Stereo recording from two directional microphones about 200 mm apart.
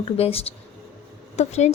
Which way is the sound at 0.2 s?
30° left (ahead or behind).